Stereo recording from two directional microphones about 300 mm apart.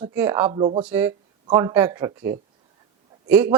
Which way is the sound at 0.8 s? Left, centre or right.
Centre.